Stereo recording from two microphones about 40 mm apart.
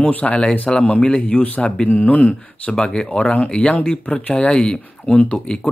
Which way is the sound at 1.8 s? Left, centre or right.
Left.